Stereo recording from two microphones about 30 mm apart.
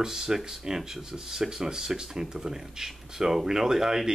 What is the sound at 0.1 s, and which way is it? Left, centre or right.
Speech, centre.